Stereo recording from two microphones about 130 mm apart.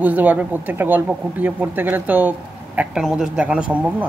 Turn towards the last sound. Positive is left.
turn(degrees=-10)  # may be behind; listen again after turning